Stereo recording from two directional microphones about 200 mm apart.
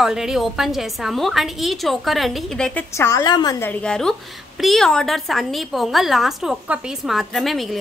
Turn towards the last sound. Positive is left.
turn(degrees=0)  # may be behind; listen again after turning